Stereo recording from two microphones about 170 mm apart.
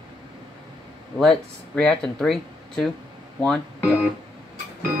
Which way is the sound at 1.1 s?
5° left (ahead or behind).